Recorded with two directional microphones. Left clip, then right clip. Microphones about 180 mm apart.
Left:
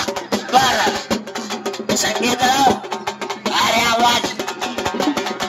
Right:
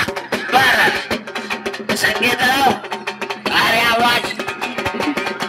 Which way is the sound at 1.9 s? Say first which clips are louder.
Right 3 dB; 50° right (ahead or behind).